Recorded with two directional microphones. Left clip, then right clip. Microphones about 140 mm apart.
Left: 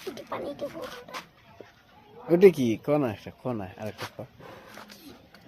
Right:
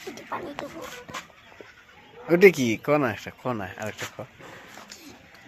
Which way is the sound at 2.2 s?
5° left (ahead or behind).